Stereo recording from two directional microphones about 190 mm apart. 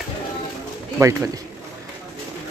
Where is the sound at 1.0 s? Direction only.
15° right (ahead or behind).